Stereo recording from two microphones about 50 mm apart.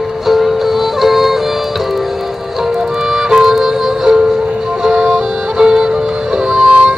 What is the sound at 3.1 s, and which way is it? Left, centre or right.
Music, centre.